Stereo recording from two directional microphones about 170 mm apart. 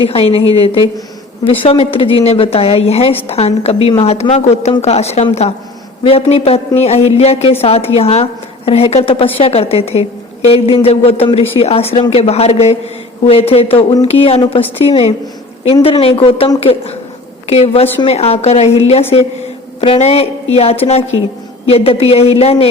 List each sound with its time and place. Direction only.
0.1 s a woman's voice: 35° left (ahead or behind)